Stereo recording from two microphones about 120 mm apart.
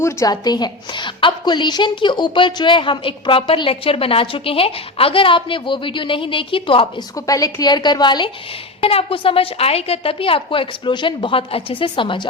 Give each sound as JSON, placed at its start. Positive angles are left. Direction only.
{"t": 0.0, "sound": "a woman's voice", "side_deg": 30}
{"t": 7.3, "sound": "a woman's voice", "side_deg": 30}
{"t": 8.8, "sound": "a woman's voice", "side_deg": 50}